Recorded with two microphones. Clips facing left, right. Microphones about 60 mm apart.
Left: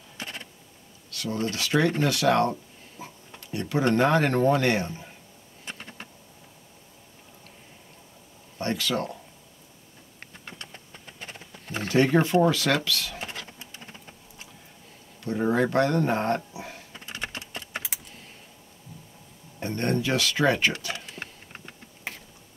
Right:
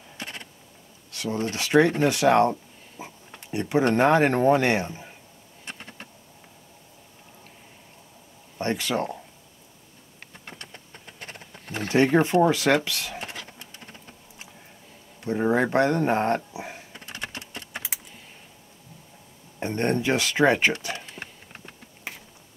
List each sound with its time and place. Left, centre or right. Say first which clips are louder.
1.1 s speech: right 1 dB; right
8.5 s speech: right 2 dB; right
11.2 s wild animals: even; right
11.9 s speech: right 1 dB; right
15.2 s speech: right 1 dB; right
16.5 s a sound: right 3 dB; right
17.2 s a sound: left 1 dB; left
19.6 s speech: right 2 dB; right
21.1 s insect: even; centre